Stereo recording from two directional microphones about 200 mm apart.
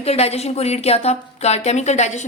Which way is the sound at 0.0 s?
30° left (ahead or behind).